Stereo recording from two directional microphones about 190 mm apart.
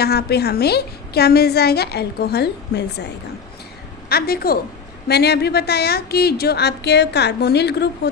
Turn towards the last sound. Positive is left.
turn(degrees=60)  # may be behind; listen again after turning